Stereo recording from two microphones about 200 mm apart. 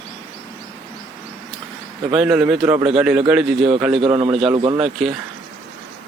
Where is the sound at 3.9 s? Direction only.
25° right (ahead or behind).